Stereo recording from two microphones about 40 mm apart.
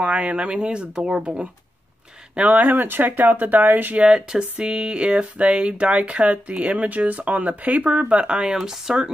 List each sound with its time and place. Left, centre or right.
0.0 s speech: right
2.3 s speech: right
4.0 s speech: right